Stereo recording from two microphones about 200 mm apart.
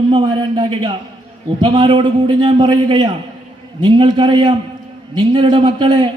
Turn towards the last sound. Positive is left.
turn(degrees=-20)  # may be behind; listen again after turning